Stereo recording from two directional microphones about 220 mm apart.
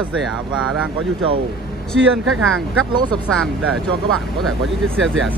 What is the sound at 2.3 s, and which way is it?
Speech, 65° right (ahead or behind).